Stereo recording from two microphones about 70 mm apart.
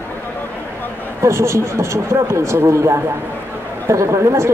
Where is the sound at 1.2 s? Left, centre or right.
Right.